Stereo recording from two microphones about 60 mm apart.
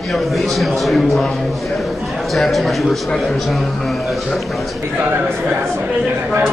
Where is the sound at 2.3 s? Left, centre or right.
Centre.